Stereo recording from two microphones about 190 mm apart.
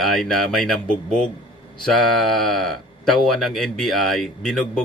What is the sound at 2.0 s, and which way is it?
Speech, centre (ahead or behind).